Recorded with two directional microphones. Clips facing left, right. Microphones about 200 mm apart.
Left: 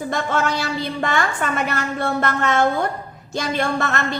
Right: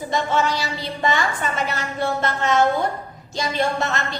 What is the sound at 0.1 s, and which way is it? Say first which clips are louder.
A woman's voice: right 1 dB; 55° left (ahead or behind).